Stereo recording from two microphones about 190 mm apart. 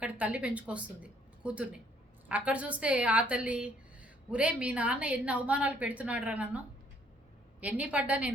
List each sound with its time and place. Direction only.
0.0 s a woman's voice: 5° right (ahead or behind)
7.6 s a woman's voice: 10° right (ahead or behind)